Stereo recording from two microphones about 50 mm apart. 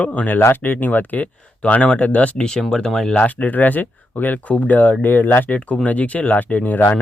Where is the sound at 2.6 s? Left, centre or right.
Centre.